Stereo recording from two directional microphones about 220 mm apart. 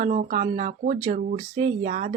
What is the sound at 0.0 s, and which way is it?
Speech, 30° right (ahead or behind).